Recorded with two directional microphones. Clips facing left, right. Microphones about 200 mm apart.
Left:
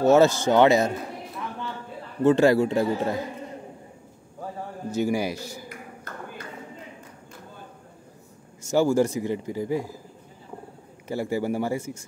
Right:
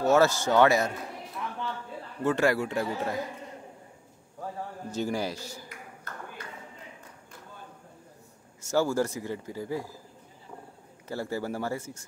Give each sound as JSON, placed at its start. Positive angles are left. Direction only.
{"t": 0.0, "sound": "a man's voice", "side_deg": 20}
{"t": 2.2, "sound": "a man's voice", "side_deg": 25}
{"t": 4.9, "sound": "speech", "side_deg": 10}
{"t": 8.6, "sound": "speech", "side_deg": 15}
{"t": 11.1, "sound": "speech", "side_deg": 15}